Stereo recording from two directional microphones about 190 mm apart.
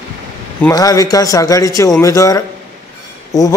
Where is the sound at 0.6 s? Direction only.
15° left (ahead or behind).